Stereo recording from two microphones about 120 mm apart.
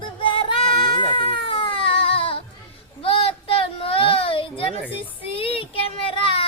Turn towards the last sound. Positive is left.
turn(degrees=50)  # may be behind; listen again after turning